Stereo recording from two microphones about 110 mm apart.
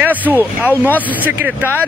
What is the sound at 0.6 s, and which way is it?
Speech, 15° left (ahead or behind).